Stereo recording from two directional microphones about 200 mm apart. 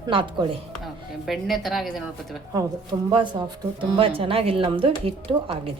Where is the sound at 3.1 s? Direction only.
25° right (ahead or behind).